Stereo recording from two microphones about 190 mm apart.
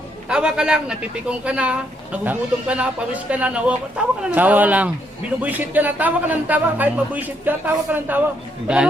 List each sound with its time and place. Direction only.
0.3 s a woman's voice: 5° right (ahead or behind)